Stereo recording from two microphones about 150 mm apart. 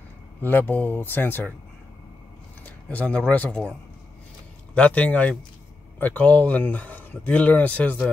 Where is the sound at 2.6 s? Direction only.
10° left (ahead or behind).